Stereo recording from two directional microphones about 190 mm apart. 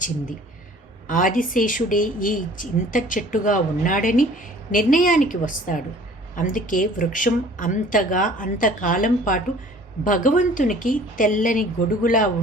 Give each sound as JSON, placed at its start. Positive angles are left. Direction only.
{"t": 1.0, "sound": "speech", "side_deg": 45}